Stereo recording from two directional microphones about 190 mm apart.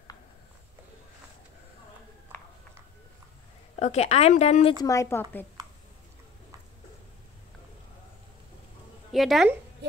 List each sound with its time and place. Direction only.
3.8 s a woman's voice: 35° left (ahead or behind)
4.7 s speech: 15° left (ahead or behind)
5.6 s a sound: 20° right (ahead or behind)
9.1 s speech: centre (ahead or behind)